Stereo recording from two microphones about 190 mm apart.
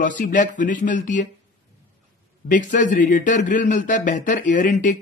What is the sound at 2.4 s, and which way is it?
A man's voice, 45° left (ahead or behind).